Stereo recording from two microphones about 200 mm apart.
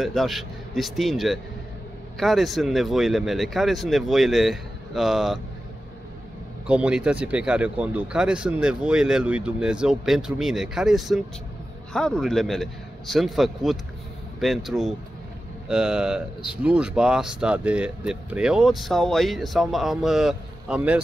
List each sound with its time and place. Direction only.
0.0 s speech: centre (ahead or behind)
6.7 s speech: 5° right (ahead or behind)